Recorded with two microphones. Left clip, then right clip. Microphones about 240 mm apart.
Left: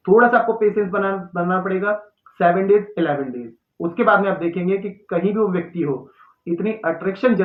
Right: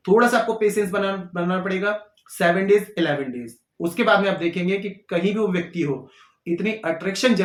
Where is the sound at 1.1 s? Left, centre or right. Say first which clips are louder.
Left 4 dB; right.